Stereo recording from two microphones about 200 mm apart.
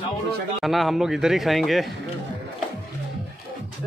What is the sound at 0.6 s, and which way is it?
Speech, centre (ahead or behind).